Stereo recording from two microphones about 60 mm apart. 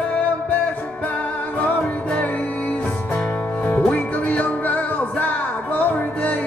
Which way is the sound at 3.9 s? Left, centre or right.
Left.